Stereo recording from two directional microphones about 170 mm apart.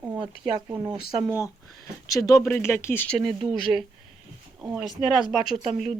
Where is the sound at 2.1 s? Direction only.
20° left (ahead or behind); by 3.8 s centre (ahead or behind).